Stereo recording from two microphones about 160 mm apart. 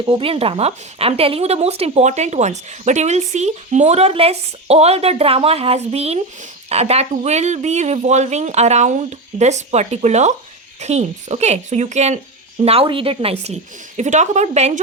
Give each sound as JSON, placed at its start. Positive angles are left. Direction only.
{"t": 0.0, "sound": "speech", "side_deg": -35}